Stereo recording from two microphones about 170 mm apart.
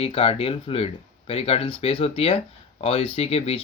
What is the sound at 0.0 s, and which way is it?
Speech, 35° left (ahead or behind).